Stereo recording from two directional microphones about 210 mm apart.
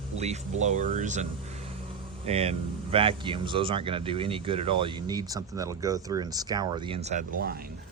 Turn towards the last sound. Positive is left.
turn(degrees=-40)  # may be behind; listen again after turning